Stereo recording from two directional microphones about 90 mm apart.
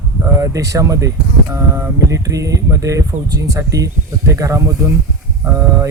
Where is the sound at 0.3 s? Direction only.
35° right (ahead or behind).